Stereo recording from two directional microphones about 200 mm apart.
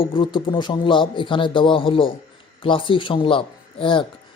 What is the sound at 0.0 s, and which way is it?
Speech, 25° left (ahead or behind).